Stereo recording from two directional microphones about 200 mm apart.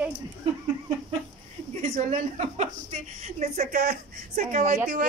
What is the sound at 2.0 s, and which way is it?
A woman's voice, 35° right (ahead or behind).